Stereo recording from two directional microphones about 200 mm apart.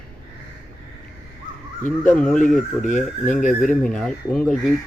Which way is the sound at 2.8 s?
40° left (ahead or behind).